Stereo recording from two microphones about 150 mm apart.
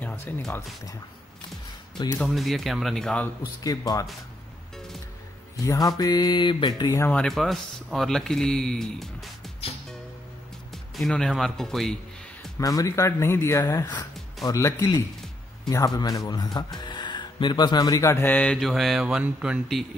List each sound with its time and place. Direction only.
0.0 s speech: 10° left (ahead or behind)
2.1 s speech: centre (ahead or behind)
3.6 s speech: 25° left (ahead or behind)
5.7 s speech: 25° left (ahead or behind)
7.0 s speech: 10° left (ahead or behind)
9.6 s music: 40° left (ahead or behind)
10.7 s speech: centre (ahead or behind)
12.5 s speech: 20° left (ahead or behind); by 19.9 s 5° right (ahead or behind)